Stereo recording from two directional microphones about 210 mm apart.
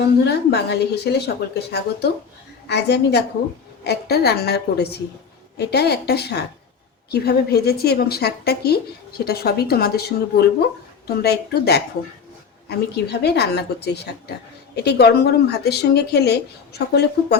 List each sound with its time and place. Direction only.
0.0 s a woman's voice: 50° left (ahead or behind)